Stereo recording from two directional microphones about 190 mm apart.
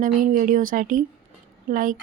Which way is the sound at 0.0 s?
45° right (ahead or behind).